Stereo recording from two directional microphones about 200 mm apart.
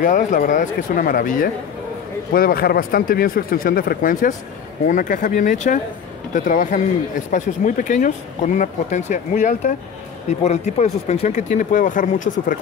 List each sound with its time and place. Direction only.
0.0 s speech: 45° left (ahead or behind)